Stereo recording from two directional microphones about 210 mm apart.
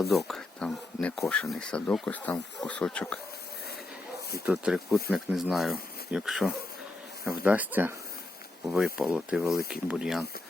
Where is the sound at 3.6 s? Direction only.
50° left (ahead or behind).